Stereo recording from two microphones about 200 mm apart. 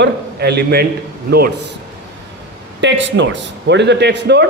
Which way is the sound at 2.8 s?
65° right (ahead or behind).